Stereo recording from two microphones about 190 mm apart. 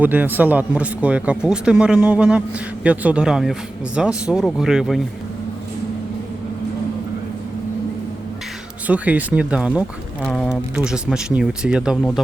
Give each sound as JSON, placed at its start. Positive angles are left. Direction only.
{"t": 0.0, "sound": "speech", "side_deg": -10}
{"t": 8.9, "sound": "speech", "side_deg": -5}